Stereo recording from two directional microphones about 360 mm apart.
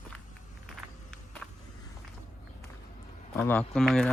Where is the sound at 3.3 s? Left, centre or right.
Centre.